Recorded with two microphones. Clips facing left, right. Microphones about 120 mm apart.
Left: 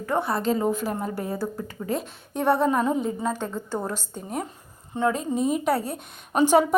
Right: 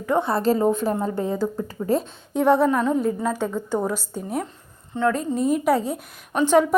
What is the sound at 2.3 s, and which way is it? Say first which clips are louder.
Speech: right 4 dB; 15° right (ahead or behind).